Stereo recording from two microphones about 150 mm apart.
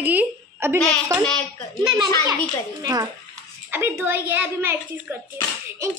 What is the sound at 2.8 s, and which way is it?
Speech, 25° right (ahead or behind).